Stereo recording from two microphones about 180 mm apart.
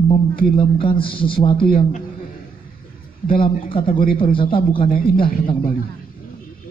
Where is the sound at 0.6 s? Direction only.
30° left (ahead or behind).